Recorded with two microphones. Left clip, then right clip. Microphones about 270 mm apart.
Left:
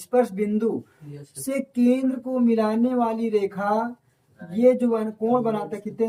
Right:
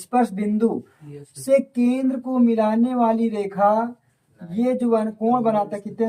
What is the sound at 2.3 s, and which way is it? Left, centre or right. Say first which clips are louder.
Speech: right 3 dB; right.